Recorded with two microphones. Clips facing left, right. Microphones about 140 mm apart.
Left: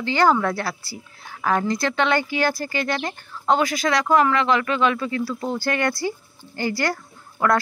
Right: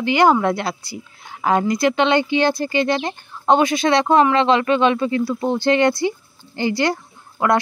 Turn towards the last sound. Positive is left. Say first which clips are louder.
# right 2 dB
turn(degrees=-20)  # may be behind; listen again after turning